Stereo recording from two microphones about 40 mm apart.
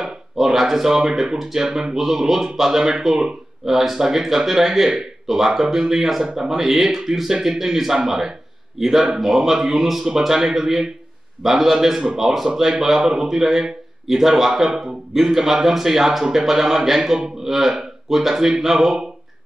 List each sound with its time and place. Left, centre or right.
0.0 s a man's voice: centre
6.5 s a man's voice: centre